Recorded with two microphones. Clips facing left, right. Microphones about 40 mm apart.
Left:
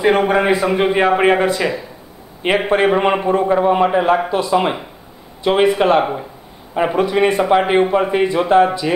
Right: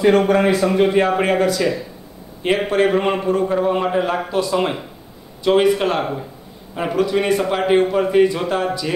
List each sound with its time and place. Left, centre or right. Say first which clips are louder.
0.0 s a man's voice: even; centre